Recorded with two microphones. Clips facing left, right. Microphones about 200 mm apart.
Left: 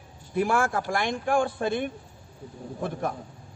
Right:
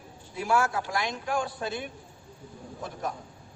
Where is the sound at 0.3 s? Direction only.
55° left (ahead or behind).